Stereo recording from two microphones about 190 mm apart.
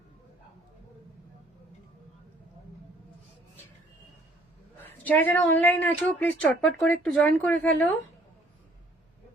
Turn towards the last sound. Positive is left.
turn(degrees=10)  # may be behind; listen again after turning